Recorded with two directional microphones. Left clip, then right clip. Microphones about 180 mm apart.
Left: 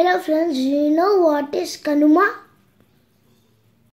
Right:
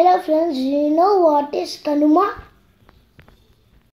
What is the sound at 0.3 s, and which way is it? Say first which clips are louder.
A woman's voice: right 1 dB; 15° left (ahead or behind).